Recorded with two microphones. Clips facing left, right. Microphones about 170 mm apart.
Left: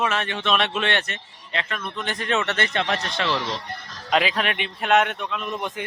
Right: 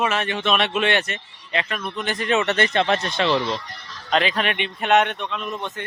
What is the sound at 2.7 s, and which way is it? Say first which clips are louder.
Speech: right 4 dB; 25° right (ahead or behind).